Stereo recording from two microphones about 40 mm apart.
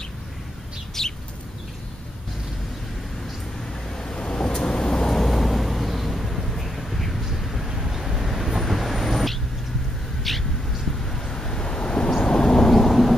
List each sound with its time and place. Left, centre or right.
1.0 s bird: centre
3.9 s vehicle: centre
10.3 s a sound: centre
11.1 s vehicle: centre
12.7 s vehicle: centre